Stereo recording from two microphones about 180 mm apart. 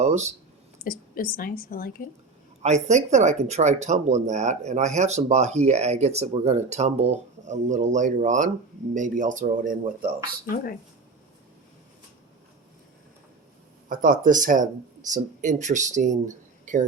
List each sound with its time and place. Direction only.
0.0 s speech: 40° right (ahead or behind)
0.8 s a woman's voice: 50° left (ahead or behind)
2.6 s speech: 40° right (ahead or behind)
10.5 s a woman's voice: 55° left (ahead or behind)
13.8 s speech: 50° right (ahead or behind)